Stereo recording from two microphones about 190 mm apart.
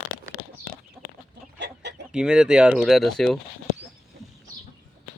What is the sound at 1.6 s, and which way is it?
Chicken, 65° right (ahead or behind).